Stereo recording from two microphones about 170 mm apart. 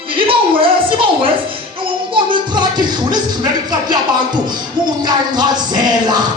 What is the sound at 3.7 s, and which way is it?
Speech, 25° right (ahead or behind).